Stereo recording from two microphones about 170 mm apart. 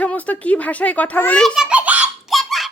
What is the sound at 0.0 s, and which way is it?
A child's voice, 10° left (ahead or behind).